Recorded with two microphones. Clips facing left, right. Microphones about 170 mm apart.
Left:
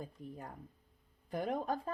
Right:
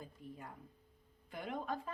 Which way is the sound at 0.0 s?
40° left (ahead or behind).